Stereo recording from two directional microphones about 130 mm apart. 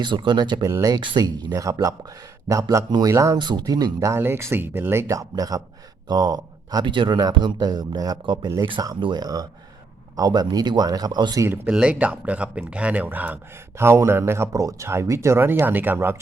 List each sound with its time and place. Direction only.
0.0 s speech: 35° right (ahead or behind)
3.3 s speech: 35° right (ahead or behind)
4.1 s speech: 20° right (ahead or behind)
11.7 s speech: 10° right (ahead or behind)